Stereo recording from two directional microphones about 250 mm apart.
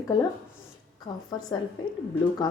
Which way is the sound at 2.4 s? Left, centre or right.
Centre.